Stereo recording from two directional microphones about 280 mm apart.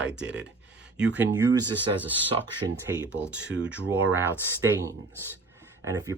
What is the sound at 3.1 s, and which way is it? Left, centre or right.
Speech, centre.